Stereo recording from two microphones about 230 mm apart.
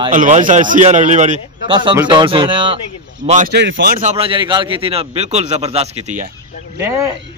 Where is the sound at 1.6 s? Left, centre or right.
Right.